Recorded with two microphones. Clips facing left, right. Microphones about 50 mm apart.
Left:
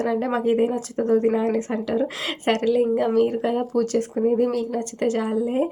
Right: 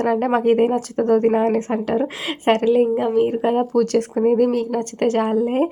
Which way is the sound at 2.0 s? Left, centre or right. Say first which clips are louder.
Right 4 dB; right.